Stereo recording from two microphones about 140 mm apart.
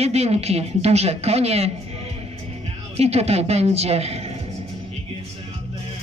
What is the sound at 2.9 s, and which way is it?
Speech, 50° right (ahead or behind).